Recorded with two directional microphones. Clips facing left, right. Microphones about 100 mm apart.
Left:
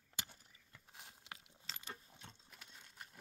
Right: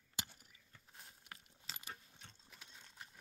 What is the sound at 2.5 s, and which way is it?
Sewing machine, centre (ahead or behind).